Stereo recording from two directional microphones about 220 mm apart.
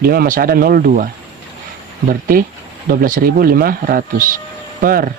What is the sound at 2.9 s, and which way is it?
Speech, 40° right (ahead or behind).